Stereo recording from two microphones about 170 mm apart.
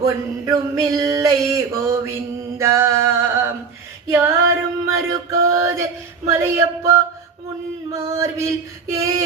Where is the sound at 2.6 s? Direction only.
15° right (ahead or behind).